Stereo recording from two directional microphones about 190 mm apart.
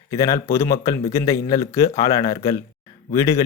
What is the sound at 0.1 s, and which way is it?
A man's voice, 15° left (ahead or behind).